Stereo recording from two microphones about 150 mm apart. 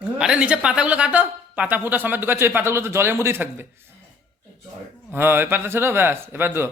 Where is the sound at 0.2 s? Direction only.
5° right (ahead or behind).